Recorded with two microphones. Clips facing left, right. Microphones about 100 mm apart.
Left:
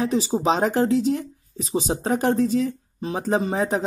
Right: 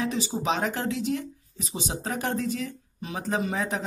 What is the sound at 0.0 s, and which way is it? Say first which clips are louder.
A woman's voice: left 6 dB; 35° left (ahead or behind).